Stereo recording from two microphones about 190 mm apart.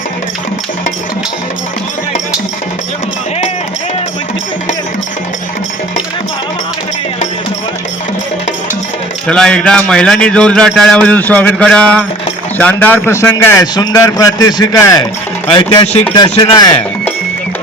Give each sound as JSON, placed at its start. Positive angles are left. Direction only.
{"t": 9.2, "sound": "a man's voice", "side_deg": 5}